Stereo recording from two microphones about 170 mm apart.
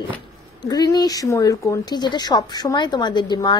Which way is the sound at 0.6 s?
25° left (ahead or behind).